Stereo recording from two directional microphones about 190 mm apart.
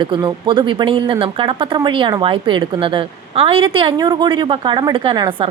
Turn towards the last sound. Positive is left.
turn(degrees=-25)  # may be behind; listen again after turning